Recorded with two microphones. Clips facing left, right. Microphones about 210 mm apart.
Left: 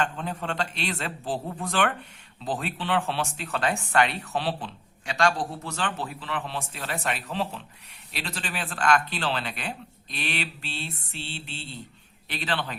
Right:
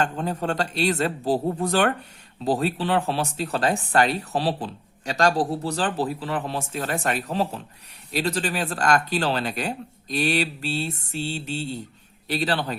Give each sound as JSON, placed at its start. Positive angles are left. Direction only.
{"t": 0.0, "sound": "speech", "side_deg": -40}